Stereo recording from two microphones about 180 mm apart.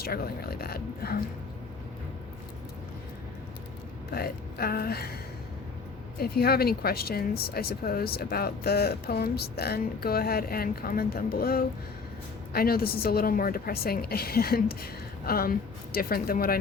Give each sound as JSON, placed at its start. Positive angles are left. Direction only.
{"t": 0.0, "sound": "speech", "side_deg": 60}
{"t": 4.1, "sound": "speech", "side_deg": 55}
{"t": 6.1, "sound": "speech", "side_deg": 60}